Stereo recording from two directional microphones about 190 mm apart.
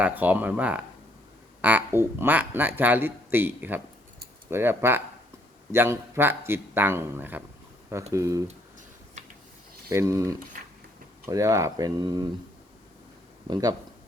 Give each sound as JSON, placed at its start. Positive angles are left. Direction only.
{"t": 0.0, "sound": "speech", "side_deg": -10}
{"t": 9.9, "sound": "speech", "side_deg": -15}
{"t": 13.5, "sound": "speech", "side_deg": -20}